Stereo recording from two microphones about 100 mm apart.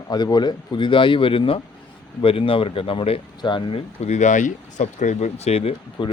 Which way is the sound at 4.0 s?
90° left.